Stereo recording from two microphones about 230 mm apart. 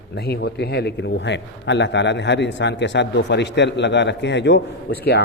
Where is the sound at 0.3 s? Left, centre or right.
Left.